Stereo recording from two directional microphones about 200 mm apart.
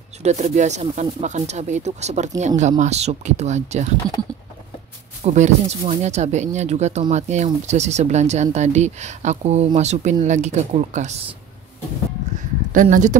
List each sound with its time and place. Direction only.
0.2 s speech: 35° right (ahead or behind)
5.2 s speech: 35° right (ahead or behind)
12.7 s speech: 40° right (ahead or behind)